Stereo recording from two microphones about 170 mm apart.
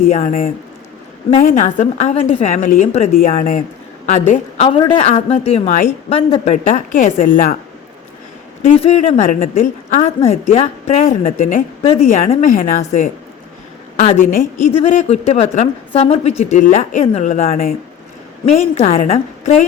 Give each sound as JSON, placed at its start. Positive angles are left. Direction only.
{"t": 0.0, "sound": "a woman's voice", "side_deg": 50}
{"t": 6.5, "sound": "speech", "side_deg": 50}
{"t": 8.6, "sound": "speech", "side_deg": 40}
{"t": 14.2, "sound": "speech", "side_deg": 50}
{"t": 18.4, "sound": "speech", "side_deg": 40}